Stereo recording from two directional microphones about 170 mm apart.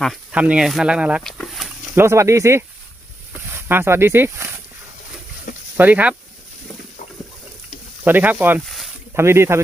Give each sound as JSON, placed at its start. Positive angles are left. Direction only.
{"t": 0.0, "sound": "speech", "side_deg": -5}
{"t": 1.2, "sound": "a sound", "side_deg": 0}
{"t": 2.0, "sound": "speech", "side_deg": -15}
{"t": 5.7, "sound": "speech", "side_deg": -10}
{"t": 8.0, "sound": "speech", "side_deg": -10}
{"t": 9.1, "sound": "speech", "side_deg": -15}